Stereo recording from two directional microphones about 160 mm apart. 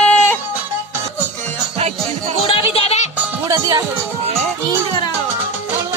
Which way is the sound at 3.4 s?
25° right (ahead or behind).